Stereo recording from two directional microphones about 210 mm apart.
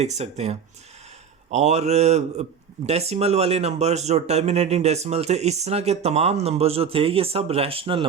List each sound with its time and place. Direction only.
0.0 s speech: 30° right (ahead or behind)